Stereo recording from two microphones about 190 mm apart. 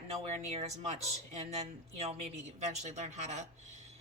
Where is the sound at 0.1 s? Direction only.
35° right (ahead or behind).